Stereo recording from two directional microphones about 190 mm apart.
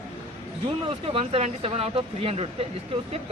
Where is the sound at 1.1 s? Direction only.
30° right (ahead or behind).